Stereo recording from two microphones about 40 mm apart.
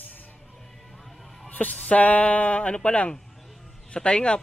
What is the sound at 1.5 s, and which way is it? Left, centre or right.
Music, left.